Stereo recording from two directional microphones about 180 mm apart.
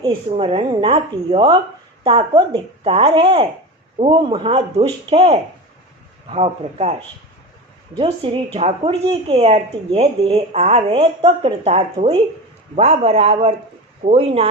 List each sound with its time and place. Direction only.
0.0 s speech: 30° right (ahead or behind)
7.9 s speech: 30° right (ahead or behind)